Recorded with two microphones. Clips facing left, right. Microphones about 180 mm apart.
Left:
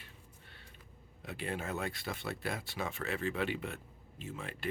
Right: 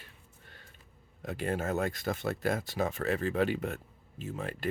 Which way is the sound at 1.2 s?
45° right (ahead or behind).